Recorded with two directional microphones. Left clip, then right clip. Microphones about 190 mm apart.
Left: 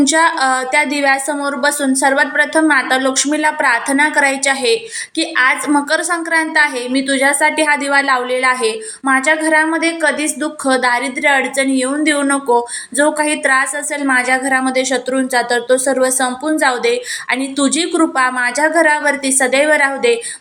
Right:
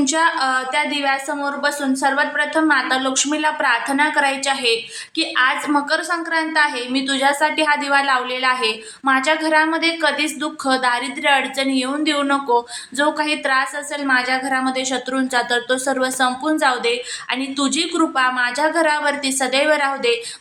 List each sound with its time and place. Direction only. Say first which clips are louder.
0.0 s a woman's voice: left 5 dB; 25° left (ahead or behind)